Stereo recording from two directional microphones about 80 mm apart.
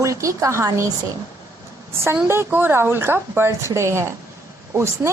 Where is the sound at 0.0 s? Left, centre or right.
Right.